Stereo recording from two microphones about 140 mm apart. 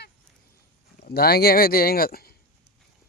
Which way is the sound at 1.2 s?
90° left.